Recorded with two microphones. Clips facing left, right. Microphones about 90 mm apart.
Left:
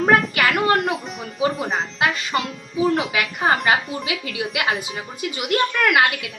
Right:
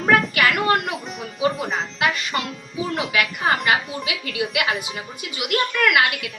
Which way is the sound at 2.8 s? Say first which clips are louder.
Left 3 dB; 35° left (ahead or behind).